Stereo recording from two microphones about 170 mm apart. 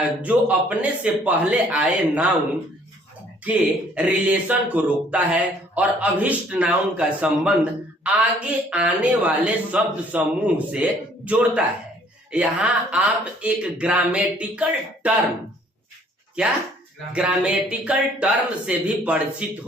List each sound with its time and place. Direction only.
0.2 s speech: 10° right (ahead or behind)
3.4 s speech: 5° right (ahead or behind)
16.4 s speech: 5° right (ahead or behind)